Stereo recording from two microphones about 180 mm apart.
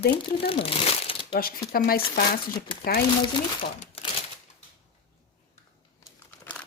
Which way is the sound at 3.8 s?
35° left (ahead or behind).